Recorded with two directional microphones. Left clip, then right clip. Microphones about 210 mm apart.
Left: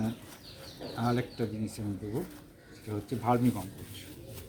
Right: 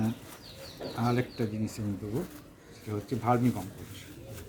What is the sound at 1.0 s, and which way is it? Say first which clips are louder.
Speech: right 1 dB; 10° right (ahead or behind).